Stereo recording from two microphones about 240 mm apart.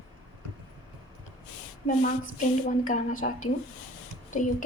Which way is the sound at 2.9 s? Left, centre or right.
Left.